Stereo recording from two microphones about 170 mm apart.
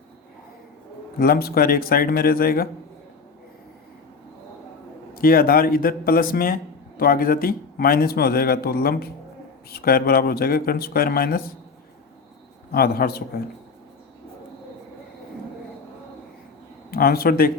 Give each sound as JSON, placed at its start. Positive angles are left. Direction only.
{"t": 1.2, "sound": "a man's voice", "side_deg": 65}
{"t": 5.1, "sound": "a man's voice", "side_deg": 60}
{"t": 12.7, "sound": "a man's voice", "side_deg": 60}
{"t": 16.9, "sound": "a man's voice", "side_deg": 60}